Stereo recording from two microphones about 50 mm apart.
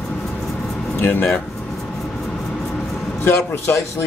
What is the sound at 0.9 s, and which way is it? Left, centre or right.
Speech, left.